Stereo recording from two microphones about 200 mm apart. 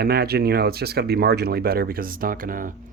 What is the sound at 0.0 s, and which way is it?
Speech, 50° right (ahead or behind).